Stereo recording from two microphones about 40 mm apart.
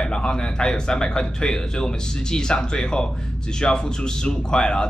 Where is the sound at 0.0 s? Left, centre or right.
Left.